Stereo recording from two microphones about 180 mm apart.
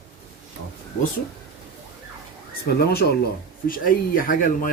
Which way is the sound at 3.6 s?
50° left (ahead or behind).